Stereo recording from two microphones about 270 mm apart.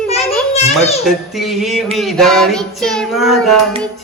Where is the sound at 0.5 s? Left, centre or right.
Left.